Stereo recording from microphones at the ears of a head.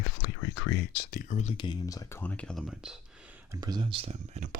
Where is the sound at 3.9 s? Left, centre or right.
Right.